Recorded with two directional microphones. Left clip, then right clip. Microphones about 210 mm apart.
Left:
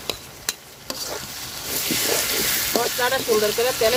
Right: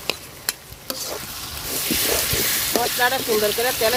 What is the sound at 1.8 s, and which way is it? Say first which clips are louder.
Sizzle: even; 5° right (ahead or behind).